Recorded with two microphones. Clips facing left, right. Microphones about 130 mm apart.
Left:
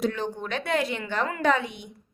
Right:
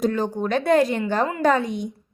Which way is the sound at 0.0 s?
40° right (ahead or behind).